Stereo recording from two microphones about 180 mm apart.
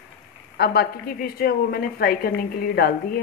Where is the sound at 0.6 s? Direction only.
60° left (ahead or behind).